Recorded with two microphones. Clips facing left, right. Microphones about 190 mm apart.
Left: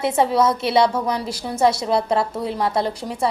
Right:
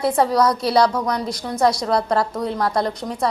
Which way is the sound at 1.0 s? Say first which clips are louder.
Even; 5° left (ahead or behind).